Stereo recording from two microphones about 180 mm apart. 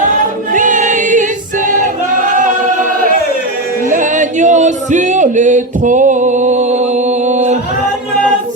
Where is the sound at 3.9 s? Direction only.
45° right (ahead or behind).